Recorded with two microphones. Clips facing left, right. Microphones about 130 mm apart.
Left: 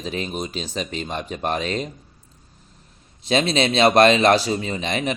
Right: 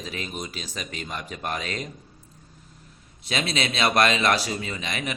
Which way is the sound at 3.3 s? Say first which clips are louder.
Left 8 dB; 30° left (ahead or behind).